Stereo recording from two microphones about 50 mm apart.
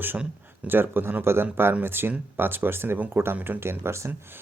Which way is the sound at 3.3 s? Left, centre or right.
Right.